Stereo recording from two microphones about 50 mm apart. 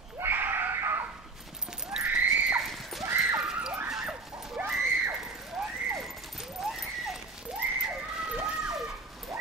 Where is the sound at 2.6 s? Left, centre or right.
Centre.